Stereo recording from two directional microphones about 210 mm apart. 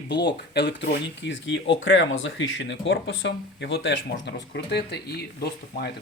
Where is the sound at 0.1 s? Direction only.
55° left (ahead or behind).